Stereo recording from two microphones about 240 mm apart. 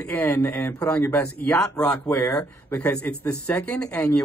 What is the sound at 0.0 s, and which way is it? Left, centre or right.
Speech, centre.